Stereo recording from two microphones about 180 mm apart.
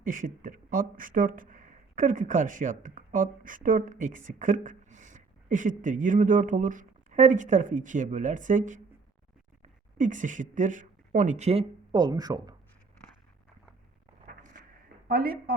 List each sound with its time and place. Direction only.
0.0 s speech: 50° right (ahead or behind)
10.0 s a woman's voice: 45° right (ahead or behind)
11.9 s speech: 25° right (ahead or behind)
14.3 s a sound: 45° right (ahead or behind)
15.0 s a woman's voice: 60° right (ahead or behind)